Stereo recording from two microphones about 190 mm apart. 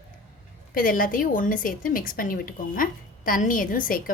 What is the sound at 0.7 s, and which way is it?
A woman's voice, 45° left (ahead or behind).